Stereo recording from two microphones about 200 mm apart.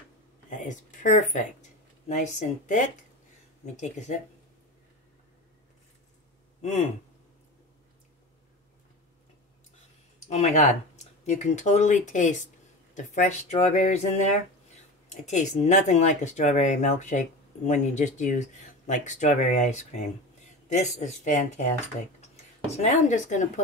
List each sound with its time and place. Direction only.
0.5 s speech: 40° left (ahead or behind)
10.3 s speech: 35° left (ahead or behind)
22.7 s speech: 35° left (ahead or behind)